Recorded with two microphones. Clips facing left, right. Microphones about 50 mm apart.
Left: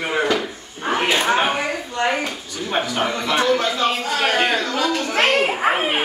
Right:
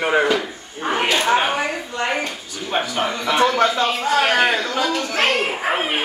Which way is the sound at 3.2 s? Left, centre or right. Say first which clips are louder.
Right 3 dB; right.